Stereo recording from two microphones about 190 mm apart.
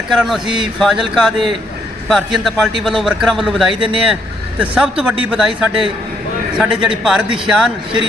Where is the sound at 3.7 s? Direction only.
25° right (ahead or behind).